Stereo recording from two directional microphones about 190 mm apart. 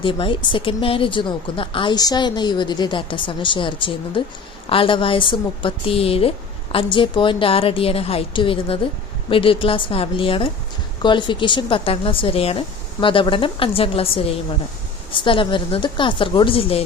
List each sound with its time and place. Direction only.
0.0 s speech: 25° left (ahead or behind)